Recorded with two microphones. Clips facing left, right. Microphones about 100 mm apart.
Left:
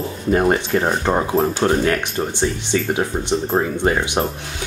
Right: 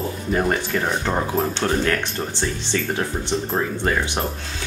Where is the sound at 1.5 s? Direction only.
15° left (ahead or behind).